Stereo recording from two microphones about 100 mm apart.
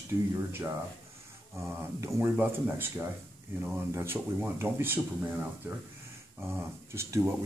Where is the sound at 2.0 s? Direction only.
20° right (ahead or behind).